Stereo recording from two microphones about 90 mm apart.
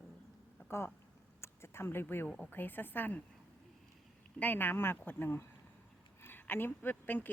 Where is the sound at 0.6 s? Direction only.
20° left (ahead or behind).